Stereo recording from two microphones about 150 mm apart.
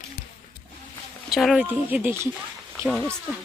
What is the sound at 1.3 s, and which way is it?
Speech, centre (ahead or behind).